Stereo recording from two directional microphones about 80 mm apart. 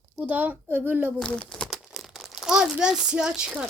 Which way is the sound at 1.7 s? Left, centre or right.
Centre.